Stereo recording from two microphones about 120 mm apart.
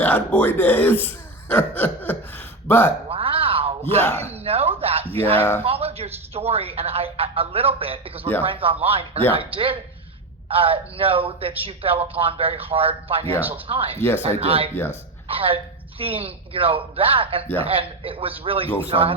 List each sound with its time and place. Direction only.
0.0 s speech: 15° left (ahead or behind)
3.1 s a sound: 50° right (ahead or behind)
4.2 s a man's voice: 60° right (ahead or behind)
5.4 s speech: 15° left (ahead or behind)
5.6 s a man's voice: 55° right (ahead or behind)